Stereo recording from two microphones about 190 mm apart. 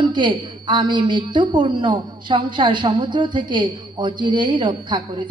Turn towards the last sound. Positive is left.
turn(degrees=-25)  # may be behind; listen again after turning